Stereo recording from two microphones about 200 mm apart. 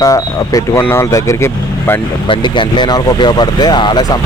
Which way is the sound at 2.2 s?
25° left (ahead or behind).